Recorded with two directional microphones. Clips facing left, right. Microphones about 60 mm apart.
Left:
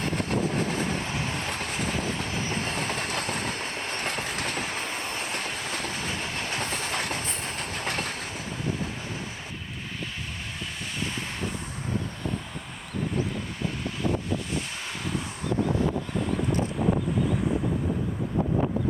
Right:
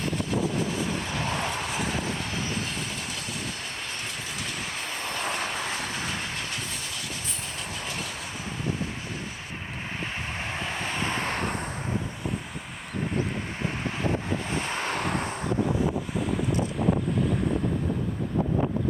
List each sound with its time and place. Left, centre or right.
0.2 s vehicle: left
2.6 s train: left
6.3 s train: left
10.6 s vehicle: right
14.5 s vehicle: right